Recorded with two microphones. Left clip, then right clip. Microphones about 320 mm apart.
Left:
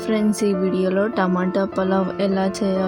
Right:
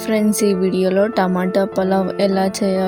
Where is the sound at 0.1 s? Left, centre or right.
Centre.